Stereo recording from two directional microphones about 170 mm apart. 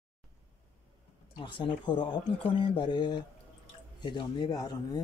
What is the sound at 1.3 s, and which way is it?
Speech, 30° left (ahead or behind).